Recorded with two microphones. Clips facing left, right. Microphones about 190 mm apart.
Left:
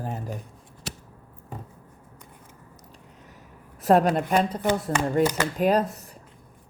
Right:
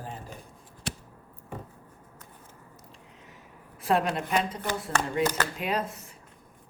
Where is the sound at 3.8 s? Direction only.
40° left (ahead or behind).